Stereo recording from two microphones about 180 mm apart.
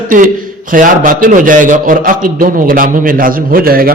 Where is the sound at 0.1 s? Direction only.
50° right (ahead or behind).